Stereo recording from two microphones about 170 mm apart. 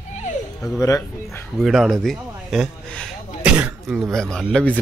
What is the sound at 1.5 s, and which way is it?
Speech, centre (ahead or behind).